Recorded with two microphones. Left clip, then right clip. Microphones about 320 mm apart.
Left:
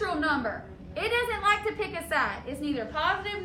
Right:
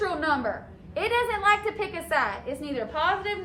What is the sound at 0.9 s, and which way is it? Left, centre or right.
A woman's voice, right.